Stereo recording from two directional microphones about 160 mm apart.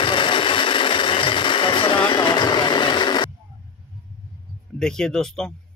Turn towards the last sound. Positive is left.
turn(degrees=5)  # may be behind; listen again after turning